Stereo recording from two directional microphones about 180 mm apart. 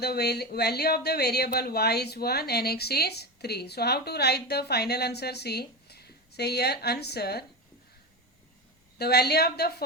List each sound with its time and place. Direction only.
0.0 s a woman's voice: 65° left (ahead or behind)
9.0 s a woman's voice: 60° left (ahead or behind)